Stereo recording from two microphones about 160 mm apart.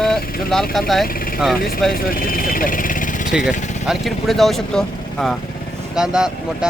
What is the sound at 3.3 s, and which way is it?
Speech, 5° right (ahead or behind).